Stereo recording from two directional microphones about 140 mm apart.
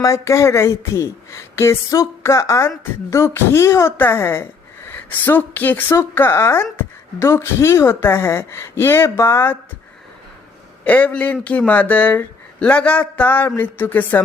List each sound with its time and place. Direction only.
0.0 s a woman's voice: 20° left (ahead or behind)
10.8 s a woman's voice: 10° left (ahead or behind)